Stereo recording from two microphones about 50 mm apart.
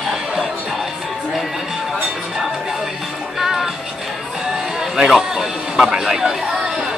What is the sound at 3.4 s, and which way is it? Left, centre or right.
Music, centre.